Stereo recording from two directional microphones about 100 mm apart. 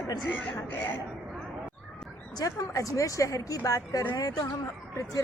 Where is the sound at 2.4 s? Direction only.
35° left (ahead or behind).